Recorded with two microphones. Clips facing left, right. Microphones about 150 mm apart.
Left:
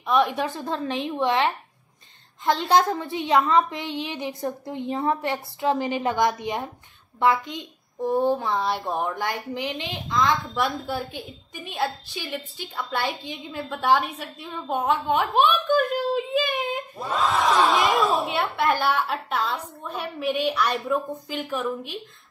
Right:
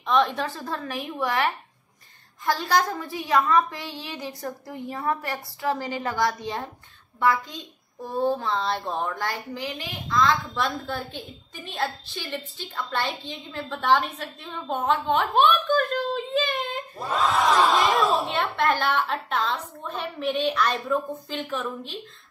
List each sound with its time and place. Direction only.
0.0 s a child's voice: 10° left (ahead or behind)
17.0 s a child's voice: centre (ahead or behind)